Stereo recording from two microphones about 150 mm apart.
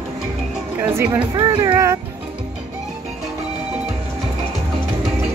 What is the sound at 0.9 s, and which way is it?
Speech, 10° right (ahead or behind).